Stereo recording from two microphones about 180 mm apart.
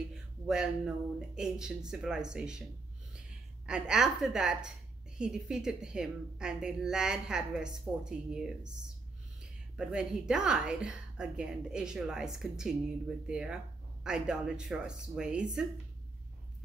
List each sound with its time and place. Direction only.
0.1 s a woman's voice: 5° right (ahead or behind)
3.6 s a woman's voice: 5° right (ahead or behind)